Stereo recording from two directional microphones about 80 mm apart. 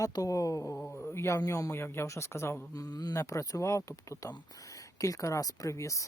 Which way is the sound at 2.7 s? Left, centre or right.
Left.